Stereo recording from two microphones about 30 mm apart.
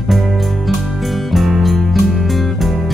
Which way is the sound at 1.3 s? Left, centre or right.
Centre.